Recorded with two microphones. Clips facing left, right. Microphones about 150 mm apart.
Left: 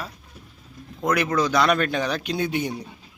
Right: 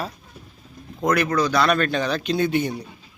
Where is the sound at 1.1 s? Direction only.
20° left (ahead or behind).